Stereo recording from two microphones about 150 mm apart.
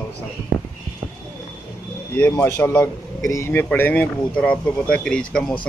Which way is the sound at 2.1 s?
10° left (ahead or behind).